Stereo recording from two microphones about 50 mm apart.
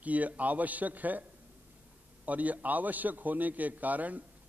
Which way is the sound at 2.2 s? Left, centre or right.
Right.